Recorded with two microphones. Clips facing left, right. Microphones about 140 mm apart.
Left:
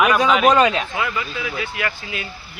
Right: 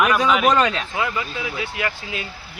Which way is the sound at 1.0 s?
25° right (ahead or behind).